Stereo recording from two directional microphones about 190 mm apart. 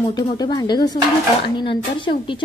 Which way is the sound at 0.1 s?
20° left (ahead or behind).